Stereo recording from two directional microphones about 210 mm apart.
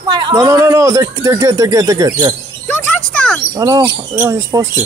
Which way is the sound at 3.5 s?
15° right (ahead or behind).